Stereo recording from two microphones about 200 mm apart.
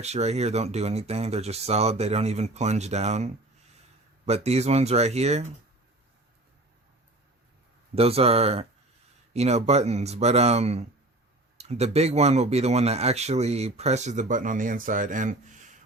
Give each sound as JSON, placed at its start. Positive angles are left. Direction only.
{"t": 0.0, "sound": "speech", "side_deg": -35}
{"t": 7.9, "sound": "speech", "side_deg": -30}